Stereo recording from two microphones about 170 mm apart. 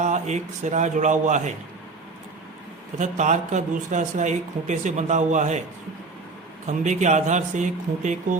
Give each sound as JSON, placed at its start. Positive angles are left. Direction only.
{"t": 0.0, "sound": "a man's voice", "side_deg": -45}
{"t": 3.0, "sound": "a man's voice", "side_deg": -45}
{"t": 6.7, "sound": "a man's voice", "side_deg": -45}